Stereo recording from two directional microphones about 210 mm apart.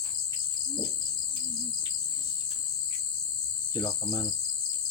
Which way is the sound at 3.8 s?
20° left (ahead or behind).